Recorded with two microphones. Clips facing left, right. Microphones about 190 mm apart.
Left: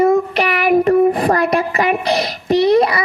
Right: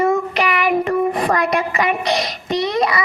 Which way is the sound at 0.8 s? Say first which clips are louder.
Left 5 dB; 40° left (ahead or behind).